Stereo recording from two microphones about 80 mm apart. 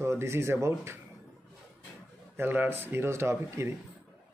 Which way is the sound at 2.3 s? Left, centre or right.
Right.